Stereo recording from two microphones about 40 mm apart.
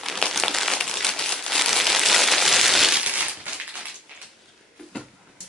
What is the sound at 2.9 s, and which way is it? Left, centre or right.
Crushing, right.